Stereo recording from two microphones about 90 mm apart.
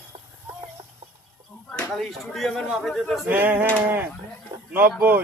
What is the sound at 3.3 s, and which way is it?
Male singing, 20° right (ahead or behind).